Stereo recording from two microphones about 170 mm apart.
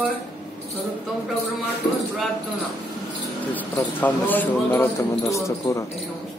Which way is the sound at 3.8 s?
10° left (ahead or behind).